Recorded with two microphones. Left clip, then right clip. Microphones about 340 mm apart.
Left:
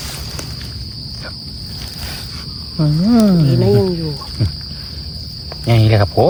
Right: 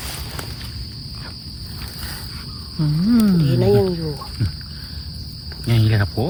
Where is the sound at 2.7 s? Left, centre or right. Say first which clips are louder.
Left 5 dB; left.